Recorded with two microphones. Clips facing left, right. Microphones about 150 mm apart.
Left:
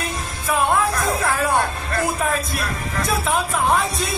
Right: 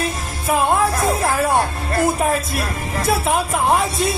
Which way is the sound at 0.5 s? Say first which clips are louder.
Right 2 dB; 30° right (ahead or behind).